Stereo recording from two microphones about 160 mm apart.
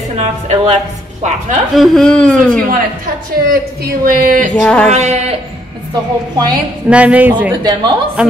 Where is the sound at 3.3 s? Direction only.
60° right (ahead or behind).